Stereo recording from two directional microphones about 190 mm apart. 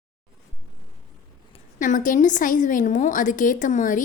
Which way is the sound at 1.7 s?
45° left (ahead or behind).